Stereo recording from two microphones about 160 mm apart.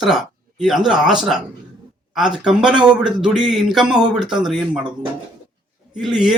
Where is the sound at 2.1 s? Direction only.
5° right (ahead or behind).